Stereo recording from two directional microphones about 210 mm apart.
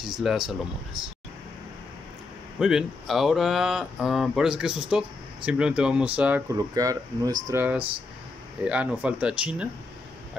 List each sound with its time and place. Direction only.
0.0 s speech: centre (ahead or behind)
2.6 s speech: centre (ahead or behind)
6.7 s speech: 15° right (ahead or behind)